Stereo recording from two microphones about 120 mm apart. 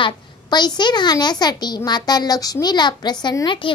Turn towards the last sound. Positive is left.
turn(degrees=40)  # may be behind; listen again after turning